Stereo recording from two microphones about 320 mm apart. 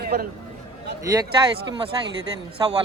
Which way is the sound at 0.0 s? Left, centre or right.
Right.